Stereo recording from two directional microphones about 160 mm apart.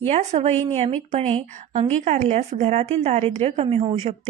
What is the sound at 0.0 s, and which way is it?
A woman's voice, 40° right (ahead or behind).